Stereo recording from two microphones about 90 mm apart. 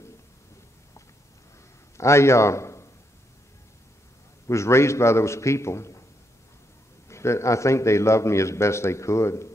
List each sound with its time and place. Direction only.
2.0 s a man's voice: 30° left (ahead or behind)
4.5 s a man's voice: 30° left (ahead or behind)
7.1 s a man's voice: 30° left (ahead or behind)